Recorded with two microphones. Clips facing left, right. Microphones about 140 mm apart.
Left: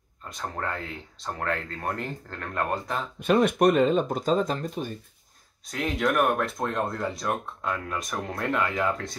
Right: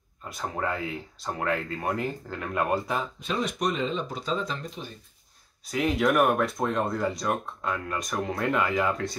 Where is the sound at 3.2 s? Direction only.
60° left (ahead or behind).